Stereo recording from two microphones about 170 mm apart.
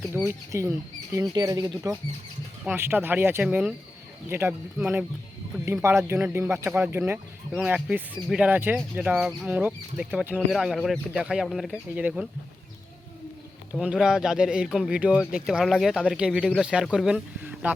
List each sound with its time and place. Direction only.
0.1 s speech: 15° right (ahead or behind)
5.6 s speech: 15° right (ahead or behind)
13.7 s speech: 5° right (ahead or behind)